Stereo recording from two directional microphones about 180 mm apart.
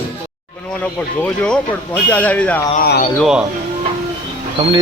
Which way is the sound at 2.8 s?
55° left (ahead or behind).